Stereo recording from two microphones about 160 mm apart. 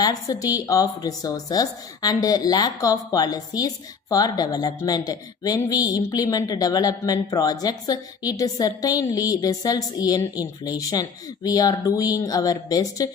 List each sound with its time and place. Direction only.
0.0 s speech: 25° left (ahead or behind)